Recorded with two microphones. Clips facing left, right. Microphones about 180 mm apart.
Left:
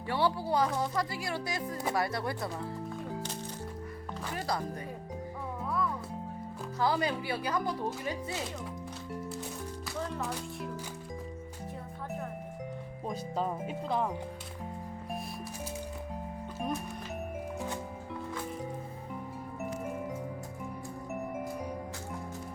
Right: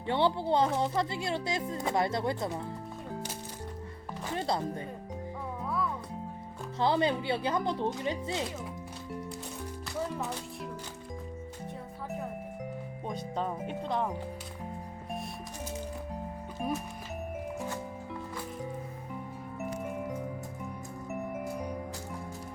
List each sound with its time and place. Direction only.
0.1 s speech: 20° right (ahead or behind)
3.1 s music: centre (ahead or behind)
4.4 s speech: 25° right (ahead or behind)
5.6 s music: centre (ahead or behind)
6.7 s speech: 25° right (ahead or behind)
9.9 s music: 5° right (ahead or behind)
13.1 s speech: 5° left (ahead or behind)
16.6 s music: centre (ahead or behind)
19.5 s music: centre (ahead or behind)